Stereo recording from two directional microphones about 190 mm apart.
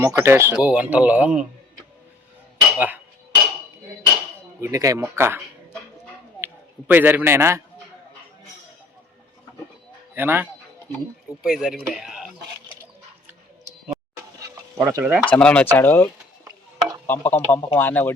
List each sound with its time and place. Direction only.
0.0 s speech: 15° right (ahead or behind)
2.6 s dishes: 10° right (ahead or behind)
4.6 s speech: 15° right (ahead or behind)
6.4 s a man's voice: 10° right (ahead or behind)
10.2 s speech: 10° right (ahead or behind)
14.4 s stir: 15° right (ahead or behind)
15.2 s speech: 5° left (ahead or behind)
16.4 s a sound: 20° right (ahead or behind)
17.1 s speech: 10° left (ahead or behind)